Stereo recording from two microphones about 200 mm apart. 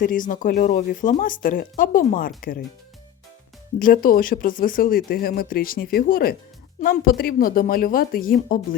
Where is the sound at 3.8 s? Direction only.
45° left (ahead or behind).